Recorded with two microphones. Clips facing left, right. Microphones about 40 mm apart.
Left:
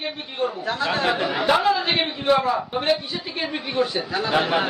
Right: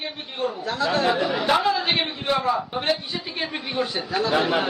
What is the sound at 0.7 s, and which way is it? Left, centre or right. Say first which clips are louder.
Speech: right 2 dB; left.